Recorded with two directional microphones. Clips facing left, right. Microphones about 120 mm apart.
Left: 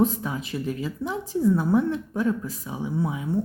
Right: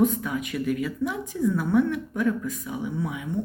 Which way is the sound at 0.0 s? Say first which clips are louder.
Even; 30° left (ahead or behind).